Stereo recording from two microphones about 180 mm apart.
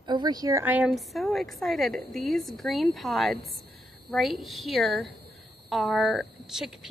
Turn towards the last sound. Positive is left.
turn(degrees=0)  # may be behind; listen again after turning